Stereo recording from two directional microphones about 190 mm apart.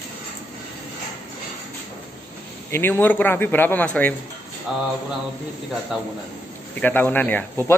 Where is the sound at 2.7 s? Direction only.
10° left (ahead or behind).